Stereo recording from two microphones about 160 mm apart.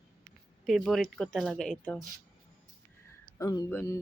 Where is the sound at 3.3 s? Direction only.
20° left (ahead or behind).